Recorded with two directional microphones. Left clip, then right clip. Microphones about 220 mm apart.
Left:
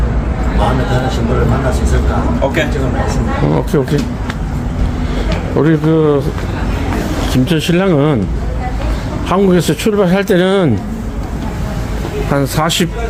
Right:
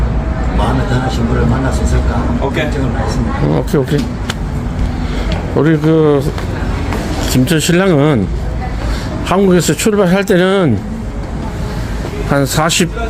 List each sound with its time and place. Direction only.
3.5 s speech: 5° right (ahead or behind)
5.5 s speech: 10° right (ahead or behind)
7.3 s speech: 15° right (ahead or behind)
9.3 s speech: 10° right (ahead or behind)
12.3 s speech: 10° right (ahead or behind)